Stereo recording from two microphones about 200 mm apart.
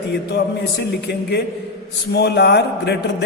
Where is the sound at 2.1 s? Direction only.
55° left (ahead or behind).